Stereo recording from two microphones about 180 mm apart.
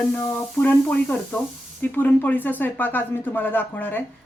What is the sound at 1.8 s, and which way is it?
Speech, 10° left (ahead or behind).